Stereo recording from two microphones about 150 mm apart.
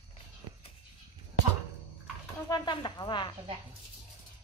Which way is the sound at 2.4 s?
30° left (ahead or behind).